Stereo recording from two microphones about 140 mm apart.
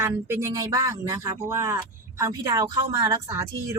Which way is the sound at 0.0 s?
20° right (ahead or behind).